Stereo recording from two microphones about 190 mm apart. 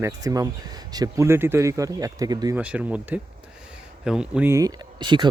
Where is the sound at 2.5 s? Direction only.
5° right (ahead or behind).